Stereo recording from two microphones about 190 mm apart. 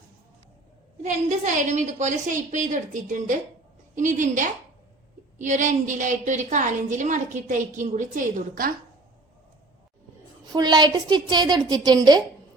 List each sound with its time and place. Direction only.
1.0 s a woman's voice: 40° right (ahead or behind)
10.5 s a woman's voice: 20° right (ahead or behind)